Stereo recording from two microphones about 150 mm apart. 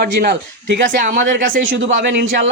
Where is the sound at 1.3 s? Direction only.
65° right (ahead or behind).